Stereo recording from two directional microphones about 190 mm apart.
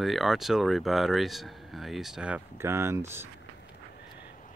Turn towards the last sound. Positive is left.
turn(degrees=50)  # may be behind; listen again after turning